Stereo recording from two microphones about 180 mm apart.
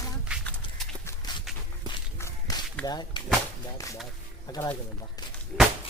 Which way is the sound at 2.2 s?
15° left (ahead or behind).